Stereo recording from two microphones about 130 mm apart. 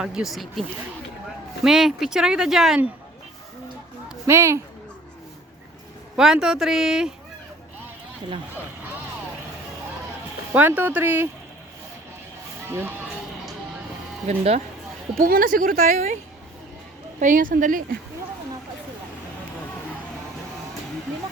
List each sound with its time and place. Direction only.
0.0 s speech: 5° right (ahead or behind)
1.6 s speech: 5° right (ahead or behind)
4.3 s speech: 20° right (ahead or behind)
6.1 s speech: 5° right (ahead or behind)
10.5 s speech: 15° right (ahead or behind)
12.6 s speech: 20° right (ahead or behind)
14.3 s speech: 55° right (ahead or behind)
15.2 s speech: 90° right
17.2 s speech: 85° right